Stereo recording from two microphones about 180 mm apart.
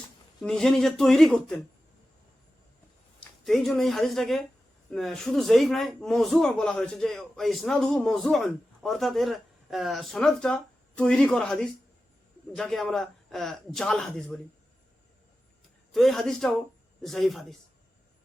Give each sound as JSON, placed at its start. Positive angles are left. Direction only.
{"t": 0.4, "sound": "a man's voice", "side_deg": 0}
{"t": 3.4, "sound": "a man's voice", "side_deg": 0}
{"t": 15.9, "sound": "a man's voice", "side_deg": 0}